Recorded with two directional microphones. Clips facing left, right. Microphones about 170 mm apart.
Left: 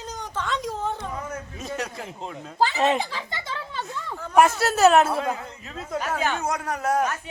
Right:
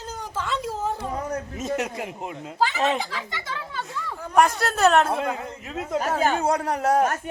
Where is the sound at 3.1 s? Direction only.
25° left (ahead or behind).